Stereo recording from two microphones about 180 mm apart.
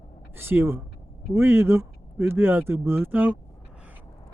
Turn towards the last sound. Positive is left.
turn(degrees=-10)  # may be behind; listen again after turning